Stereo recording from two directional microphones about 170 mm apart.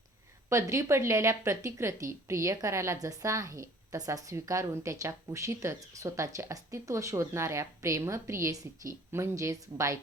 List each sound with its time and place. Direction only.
0.5 s speech: 20° right (ahead or behind)